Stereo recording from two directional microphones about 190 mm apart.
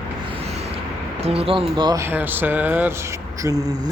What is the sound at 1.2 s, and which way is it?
Speech, 30° right (ahead or behind).